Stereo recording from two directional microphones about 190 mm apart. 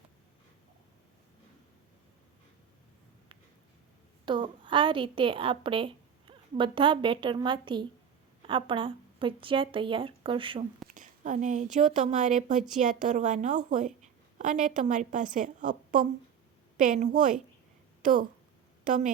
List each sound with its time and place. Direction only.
4.3 s a woman's voice: 25° right (ahead or behind)
10.9 s a woman's voice: 45° right (ahead or behind)
18.9 s a woman's voice: 45° right (ahead or behind)